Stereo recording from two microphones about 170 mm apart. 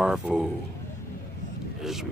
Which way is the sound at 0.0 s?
5° right (ahead or behind).